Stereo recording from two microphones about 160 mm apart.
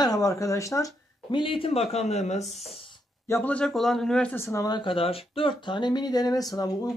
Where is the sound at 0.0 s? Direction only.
20° left (ahead or behind); by 2.6 s 45° left (ahead or behind).